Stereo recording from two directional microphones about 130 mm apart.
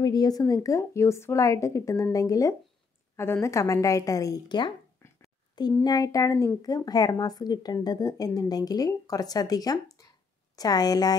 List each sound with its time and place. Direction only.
0.0 s speech: 30° left (ahead or behind)
5.0 s a sound: 20° left (ahead or behind)
5.9 s speech: 25° left (ahead or behind)
6.6 s speech: 30° left (ahead or behind)